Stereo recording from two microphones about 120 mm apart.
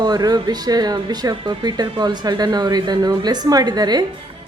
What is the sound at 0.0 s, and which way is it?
Speech, 35° right (ahead or behind).